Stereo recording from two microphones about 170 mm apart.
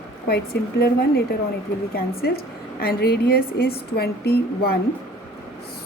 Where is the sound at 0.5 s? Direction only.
85° left.